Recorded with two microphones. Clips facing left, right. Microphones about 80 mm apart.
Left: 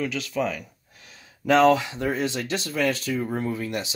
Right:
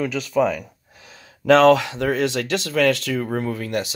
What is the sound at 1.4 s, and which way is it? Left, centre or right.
Speech, right.